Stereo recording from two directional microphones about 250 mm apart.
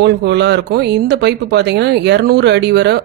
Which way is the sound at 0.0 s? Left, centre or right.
Right.